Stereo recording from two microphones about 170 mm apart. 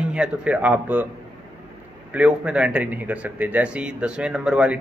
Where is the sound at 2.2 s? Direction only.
5° right (ahead or behind).